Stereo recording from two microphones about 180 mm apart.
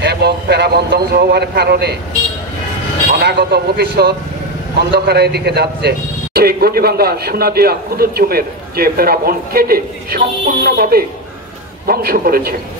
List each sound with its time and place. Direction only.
0.0 s speech: 65° right (ahead or behind)
3.2 s a man's voice: 65° right (ahead or behind)